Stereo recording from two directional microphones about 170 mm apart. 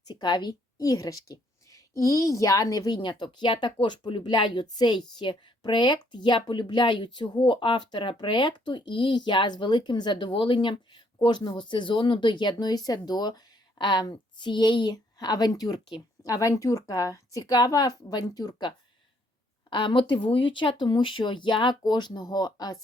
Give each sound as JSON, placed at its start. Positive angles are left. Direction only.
{"t": 0.1, "sound": "a woman's voice", "side_deg": 25}
{"t": 19.7, "sound": "a woman's voice", "side_deg": 30}